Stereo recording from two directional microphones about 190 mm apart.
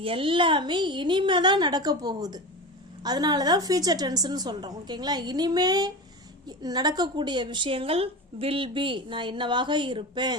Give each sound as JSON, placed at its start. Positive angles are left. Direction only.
{"t": 0.0, "sound": "a woman's voice", "side_deg": -30}